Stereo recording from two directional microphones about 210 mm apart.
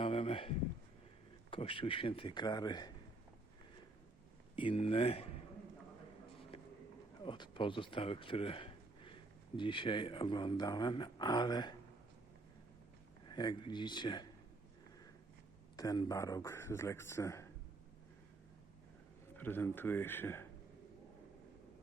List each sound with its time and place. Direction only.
0.0 s a sound: 25° left (ahead or behind)
1.5 s speech: 25° left (ahead or behind)
4.5 s speech: 25° left (ahead or behind)
7.3 s speech: 20° left (ahead or behind)
13.2 s speech: 20° left (ahead or behind)
15.7 s a man's voice: 20° left (ahead or behind)
19.4 s a man's voice: 10° left (ahead or behind)